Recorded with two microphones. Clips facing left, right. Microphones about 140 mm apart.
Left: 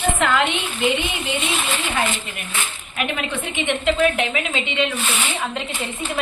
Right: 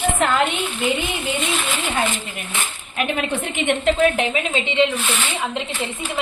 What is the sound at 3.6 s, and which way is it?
A woman's voice, 35° right (ahead or behind).